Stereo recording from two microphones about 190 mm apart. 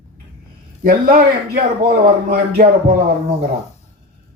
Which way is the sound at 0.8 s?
50° right (ahead or behind).